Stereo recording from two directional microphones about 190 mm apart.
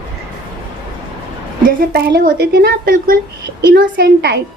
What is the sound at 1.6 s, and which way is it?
A woman's voice, 55° right (ahead or behind).